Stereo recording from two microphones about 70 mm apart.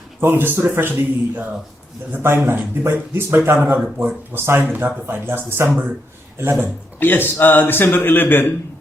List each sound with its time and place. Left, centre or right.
0.2 s speech: right
3.8 s speech: centre
4.4 s speech: right
7.0 s a man's voice: left